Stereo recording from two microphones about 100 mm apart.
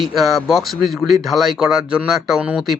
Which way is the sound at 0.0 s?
Centre (ahead or behind).